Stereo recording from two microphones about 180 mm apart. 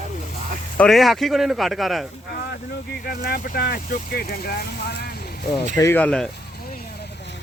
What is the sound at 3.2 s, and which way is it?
Speech, 60° left (ahead or behind).